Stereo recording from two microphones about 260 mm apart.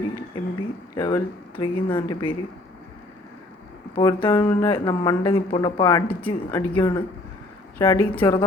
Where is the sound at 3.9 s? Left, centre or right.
Centre.